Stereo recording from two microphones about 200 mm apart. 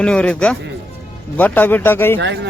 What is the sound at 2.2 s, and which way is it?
Speech, 60° right (ahead or behind).